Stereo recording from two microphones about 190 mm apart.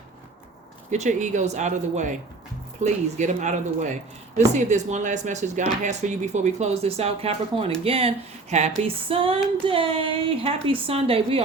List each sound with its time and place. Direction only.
0.9 s a woman's voice: 40° right (ahead or behind)